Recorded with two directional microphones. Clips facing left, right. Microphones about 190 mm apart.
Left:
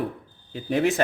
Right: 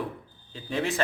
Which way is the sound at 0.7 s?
50° left (ahead or behind).